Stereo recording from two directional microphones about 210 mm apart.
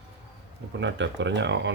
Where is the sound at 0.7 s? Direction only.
60° right (ahead or behind).